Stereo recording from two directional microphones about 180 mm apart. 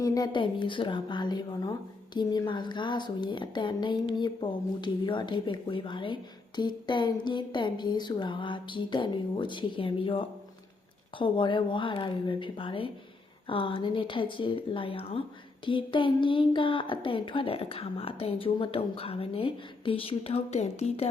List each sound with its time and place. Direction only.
0.0 s a woman's voice: 20° left (ahead or behind)